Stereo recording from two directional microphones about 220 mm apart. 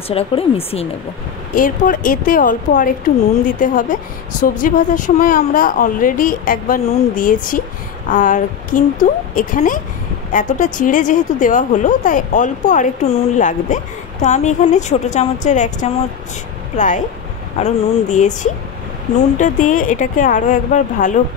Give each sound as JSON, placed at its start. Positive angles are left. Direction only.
{"t": 0.1, "sound": "speech", "side_deg": 25}
{"t": 1.5, "sound": "a woman's voice", "side_deg": 40}